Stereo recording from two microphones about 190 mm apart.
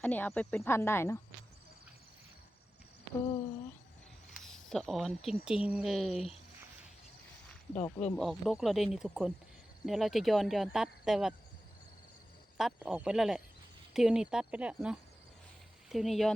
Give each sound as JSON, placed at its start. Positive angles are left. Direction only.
{"t": 0.0, "sound": "speech", "side_deg": 10}
{"t": 4.4, "sound": "speech", "side_deg": 0}
{"t": 7.7, "sound": "speech", "side_deg": 40}
{"t": 8.1, "sound": "speech", "side_deg": 0}
{"t": 12.5, "sound": "speech", "side_deg": -5}